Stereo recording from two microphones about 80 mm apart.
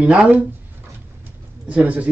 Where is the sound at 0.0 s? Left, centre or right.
Centre.